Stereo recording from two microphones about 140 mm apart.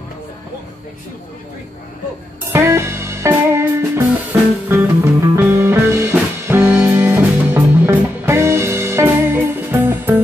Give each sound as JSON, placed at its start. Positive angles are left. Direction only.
{"t": 2.5, "sound": "music", "side_deg": -20}